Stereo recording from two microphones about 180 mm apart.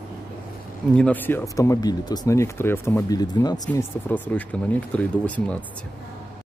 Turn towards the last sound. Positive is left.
turn(degrees=5)  # may be behind; listen again after turning